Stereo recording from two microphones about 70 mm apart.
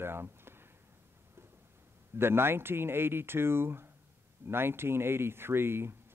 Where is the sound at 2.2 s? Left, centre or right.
Right.